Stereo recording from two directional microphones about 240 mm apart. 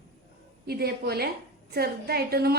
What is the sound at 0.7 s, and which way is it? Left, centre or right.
A woman's voice, right.